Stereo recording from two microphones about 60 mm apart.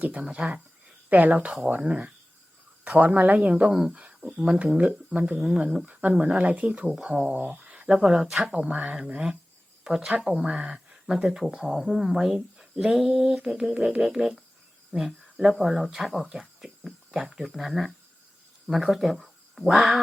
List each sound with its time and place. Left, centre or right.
0.0 s speech: right
9.8 s speech: centre
10.4 s speech: centre